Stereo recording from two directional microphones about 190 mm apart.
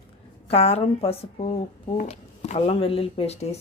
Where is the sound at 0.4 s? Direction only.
30° left (ahead or behind).